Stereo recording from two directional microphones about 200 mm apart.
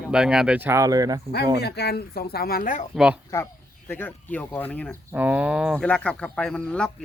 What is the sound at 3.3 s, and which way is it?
Speech, 10° left (ahead or behind).